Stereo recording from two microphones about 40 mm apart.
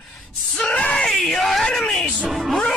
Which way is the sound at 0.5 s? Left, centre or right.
Left.